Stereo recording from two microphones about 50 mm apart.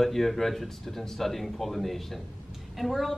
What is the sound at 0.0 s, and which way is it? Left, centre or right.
A woman's voice, centre.